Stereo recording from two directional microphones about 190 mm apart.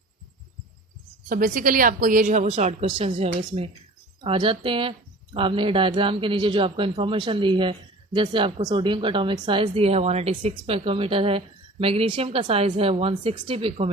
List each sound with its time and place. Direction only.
1.3 s a woman's voice: 45° right (ahead or behind); by 13.9 s 30° right (ahead or behind)